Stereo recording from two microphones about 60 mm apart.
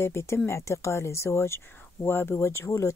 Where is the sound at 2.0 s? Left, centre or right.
Left.